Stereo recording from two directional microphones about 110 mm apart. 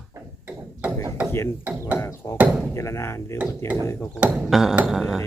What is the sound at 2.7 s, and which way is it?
Speech, 25° left (ahead or behind).